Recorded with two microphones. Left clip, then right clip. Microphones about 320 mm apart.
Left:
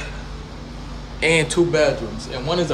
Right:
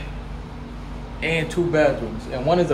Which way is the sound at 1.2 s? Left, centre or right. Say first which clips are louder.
Left 6 dB; centre.